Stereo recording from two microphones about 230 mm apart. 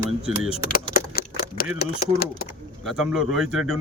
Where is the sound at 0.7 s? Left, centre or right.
Left.